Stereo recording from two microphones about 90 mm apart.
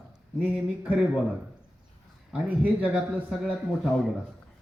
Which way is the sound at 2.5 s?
20° right (ahead or behind).